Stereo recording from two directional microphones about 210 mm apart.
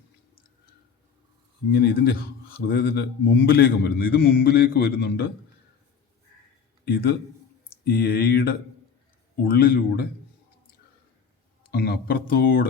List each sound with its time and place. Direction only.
1.7 s a man's voice: 50° left (ahead or behind)
6.8 s a man's voice: 50° left (ahead or behind)
11.7 s a man's voice: 45° left (ahead or behind)